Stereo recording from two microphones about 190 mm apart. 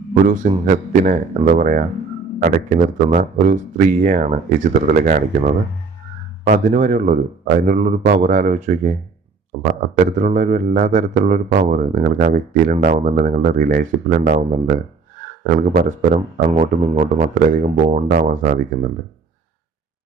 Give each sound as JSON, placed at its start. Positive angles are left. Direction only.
{"t": 0.7, "sound": "speech", "side_deg": -40}